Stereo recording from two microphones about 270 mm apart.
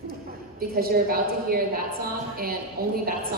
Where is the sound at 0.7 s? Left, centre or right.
Right.